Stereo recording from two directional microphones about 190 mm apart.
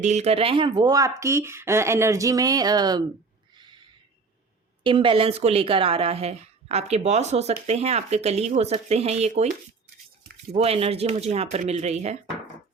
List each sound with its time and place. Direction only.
0.0 s speech: 35° right (ahead or behind); by 3.0 s 20° right (ahead or behind)
4.8 s a woman's voice: 25° right (ahead or behind)
10.5 s a woman's voice: 30° right (ahead or behind)